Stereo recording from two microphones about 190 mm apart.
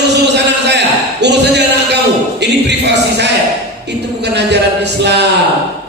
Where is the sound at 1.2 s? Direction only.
65° right (ahead or behind).